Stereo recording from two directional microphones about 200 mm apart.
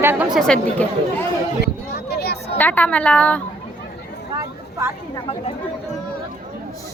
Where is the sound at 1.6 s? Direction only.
55° left (ahead or behind).